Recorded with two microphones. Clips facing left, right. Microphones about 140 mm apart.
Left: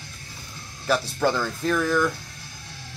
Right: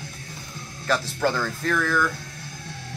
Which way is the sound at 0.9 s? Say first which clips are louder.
Left 1 dB; 15° left (ahead or behind).